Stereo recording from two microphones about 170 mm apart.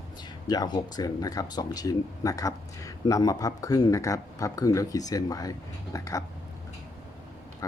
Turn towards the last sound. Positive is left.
turn(degrees=20)  # may be behind; listen again after turning